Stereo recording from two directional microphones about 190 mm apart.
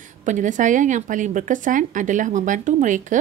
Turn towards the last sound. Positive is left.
turn(degrees=-40)  # may be behind; listen again after turning